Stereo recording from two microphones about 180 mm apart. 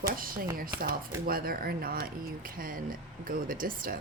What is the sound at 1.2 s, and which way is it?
Speech, 55° right (ahead or behind).